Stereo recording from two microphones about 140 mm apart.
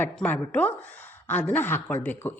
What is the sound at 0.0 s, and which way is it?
A woman's voice, 10° left (ahead or behind).